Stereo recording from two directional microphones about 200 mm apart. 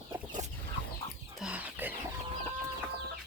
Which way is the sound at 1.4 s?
5° right (ahead or behind).